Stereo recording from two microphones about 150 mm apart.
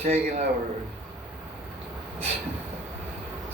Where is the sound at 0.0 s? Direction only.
45° right (ahead or behind).